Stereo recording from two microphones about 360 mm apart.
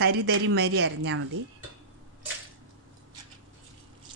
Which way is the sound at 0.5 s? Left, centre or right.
Right.